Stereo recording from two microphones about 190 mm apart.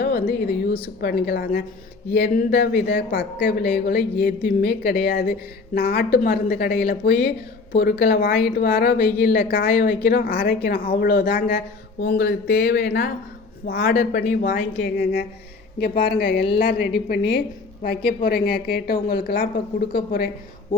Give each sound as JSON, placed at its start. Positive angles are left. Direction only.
{"t": 0.0, "sound": "a woman's voice", "side_deg": 55}